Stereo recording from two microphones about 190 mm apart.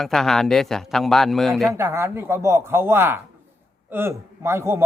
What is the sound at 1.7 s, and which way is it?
Speech, 15° right (ahead or behind).